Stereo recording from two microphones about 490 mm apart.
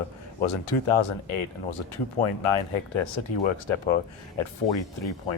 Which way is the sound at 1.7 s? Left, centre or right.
Left.